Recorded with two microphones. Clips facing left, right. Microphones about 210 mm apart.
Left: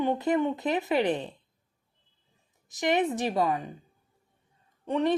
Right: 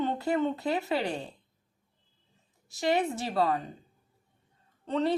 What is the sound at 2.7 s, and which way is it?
Speech, 20° left (ahead or behind).